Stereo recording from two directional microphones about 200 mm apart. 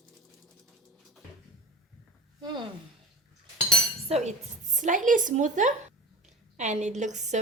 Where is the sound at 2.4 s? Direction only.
20° right (ahead or behind).